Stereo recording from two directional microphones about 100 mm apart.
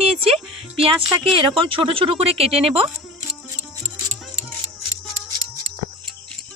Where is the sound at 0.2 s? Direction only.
70° right (ahead or behind).